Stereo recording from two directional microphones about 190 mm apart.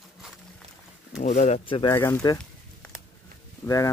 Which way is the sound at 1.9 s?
15° left (ahead or behind).